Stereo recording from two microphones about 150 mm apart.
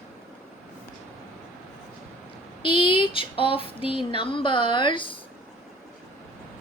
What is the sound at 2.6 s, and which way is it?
Female singing, 35° left (ahead or behind).